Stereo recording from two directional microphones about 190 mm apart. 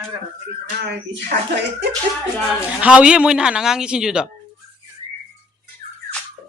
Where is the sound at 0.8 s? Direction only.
60° right (ahead or behind).